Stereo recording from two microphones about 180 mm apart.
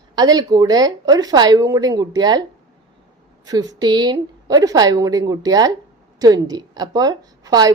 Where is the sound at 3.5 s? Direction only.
20° right (ahead or behind).